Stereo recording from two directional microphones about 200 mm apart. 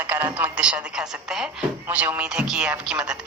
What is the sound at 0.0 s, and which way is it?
Speech, 10° right (ahead or behind).